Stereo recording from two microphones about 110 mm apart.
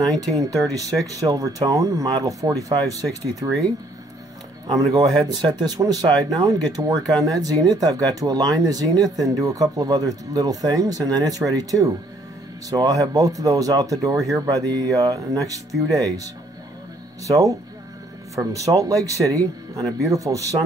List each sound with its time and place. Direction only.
0.0 s speech: 35° right (ahead or behind)
4.7 s speech: 35° right (ahead or behind)